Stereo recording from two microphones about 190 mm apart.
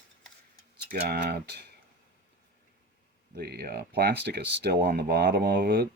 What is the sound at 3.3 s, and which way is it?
Speech, 55° right (ahead or behind).